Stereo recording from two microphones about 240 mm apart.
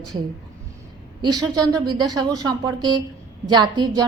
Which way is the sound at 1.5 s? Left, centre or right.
Centre.